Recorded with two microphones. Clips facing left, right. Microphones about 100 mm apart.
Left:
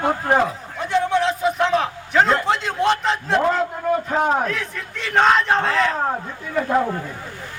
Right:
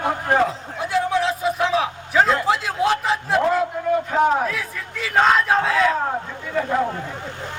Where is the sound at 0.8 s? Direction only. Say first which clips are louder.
Left 1 dB; 5° right (ahead or behind).